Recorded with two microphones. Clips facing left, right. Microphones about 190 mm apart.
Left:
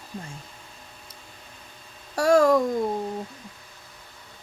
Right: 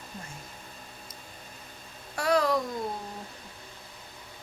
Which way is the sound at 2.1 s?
45° left (ahead or behind).